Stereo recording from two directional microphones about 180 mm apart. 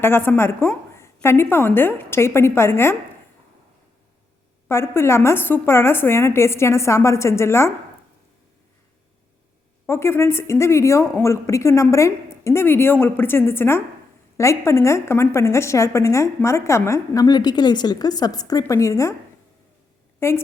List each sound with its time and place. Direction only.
0.0 s a woman's voice: 10° left (ahead or behind)
4.7 s a woman's voice: 15° left (ahead or behind)
9.8 s a woman's voice: 15° left (ahead or behind)
20.1 s a woman's voice: 15° left (ahead or behind)